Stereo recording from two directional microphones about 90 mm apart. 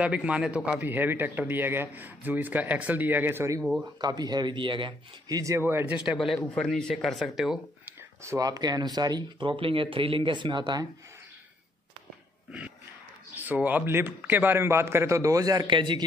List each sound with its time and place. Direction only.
0.0 s speech: 15° right (ahead or behind)
4.0 s speech: 50° right (ahead or behind); by 4.9 s 65° right (ahead or behind)
5.3 s speech: 35° right (ahead or behind)
5.6 s speech: 25° right (ahead or behind)
6.1 s speech: centre (ahead or behind)
8.2 s speech: 35° right (ahead or behind); by 10.9 s 55° right (ahead or behind)
12.4 s a sound: 15° right (ahead or behind)
13.4 s speech: 20° right (ahead or behind); by 15.7 s 40° right (ahead or behind)
15.7 s speech: 60° right (ahead or behind)